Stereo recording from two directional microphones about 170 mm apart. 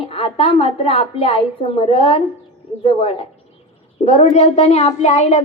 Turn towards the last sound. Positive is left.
turn(degrees=40)  # may be behind; listen again after turning